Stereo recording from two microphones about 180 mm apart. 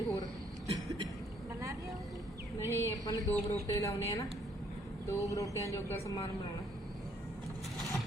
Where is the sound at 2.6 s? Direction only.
15° left (ahead or behind).